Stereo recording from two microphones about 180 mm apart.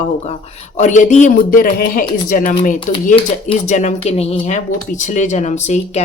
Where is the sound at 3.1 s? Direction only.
35° left (ahead or behind).